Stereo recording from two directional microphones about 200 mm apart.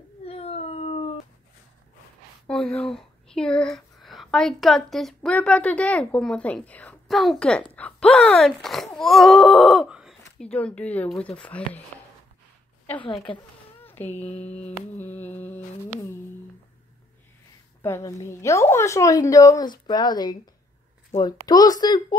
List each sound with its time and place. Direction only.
0.2 s howl: 30° left (ahead or behind)
2.4 s speech: 5° left (ahead or behind)
13.8 s speech: 10° left (ahead or behind)
15.0 s humming: 10° left (ahead or behind)
17.8 s a woman's voice: 15° left (ahead or behind)